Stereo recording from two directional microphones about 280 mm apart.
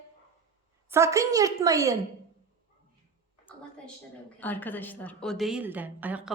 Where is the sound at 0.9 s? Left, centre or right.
Centre.